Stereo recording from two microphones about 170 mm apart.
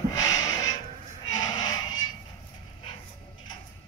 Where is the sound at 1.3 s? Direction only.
25° left (ahead or behind).